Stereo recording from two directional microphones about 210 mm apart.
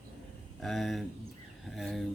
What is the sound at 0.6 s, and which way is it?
Speech, centre (ahead or behind).